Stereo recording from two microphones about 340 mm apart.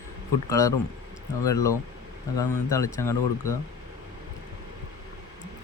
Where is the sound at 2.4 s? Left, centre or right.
Centre.